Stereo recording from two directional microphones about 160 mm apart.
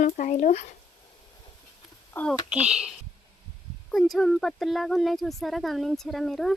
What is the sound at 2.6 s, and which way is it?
Speech, 5° right (ahead or behind).